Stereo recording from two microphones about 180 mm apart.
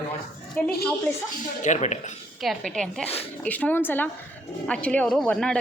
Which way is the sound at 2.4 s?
Centre (ahead or behind).